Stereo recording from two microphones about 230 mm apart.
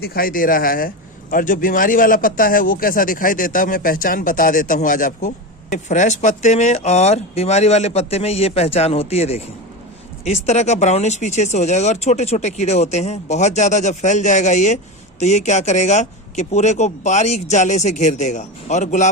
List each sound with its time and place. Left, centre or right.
0.0 s speech: left